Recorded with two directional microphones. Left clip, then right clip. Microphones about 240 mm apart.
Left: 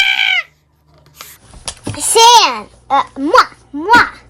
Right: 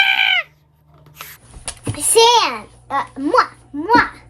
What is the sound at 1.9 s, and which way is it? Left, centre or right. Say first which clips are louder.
Babbling: left 5 dB; left.